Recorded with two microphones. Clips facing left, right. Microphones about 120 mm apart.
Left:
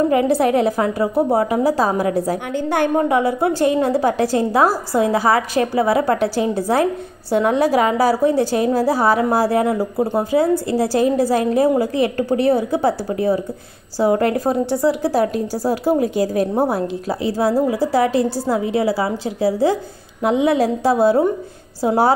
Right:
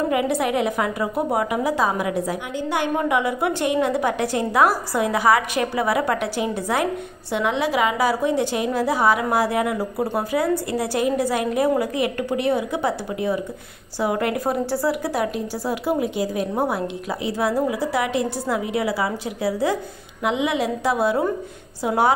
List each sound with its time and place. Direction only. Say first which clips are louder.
0.1 s a woman's voice: left 6 dB; 35° left (ahead or behind)
2.5 s a woman's voice: left 6 dB; 50° left (ahead or behind)
3.0 s a woman's voice: left 5 dB; 35° left (ahead or behind)
15.0 s a woman's voice: left 6 dB; 35° left (ahead or behind)